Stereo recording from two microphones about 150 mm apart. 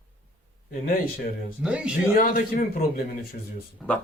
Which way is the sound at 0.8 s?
70° left (ahead or behind).